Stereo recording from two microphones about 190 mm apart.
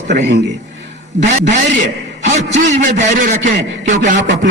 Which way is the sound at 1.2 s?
60° right (ahead or behind).